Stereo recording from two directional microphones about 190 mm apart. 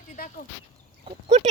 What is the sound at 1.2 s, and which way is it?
Speech, 35° right (ahead or behind).